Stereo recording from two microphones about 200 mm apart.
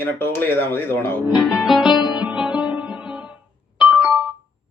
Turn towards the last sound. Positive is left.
turn(degrees=-5)  # may be behind; listen again after turning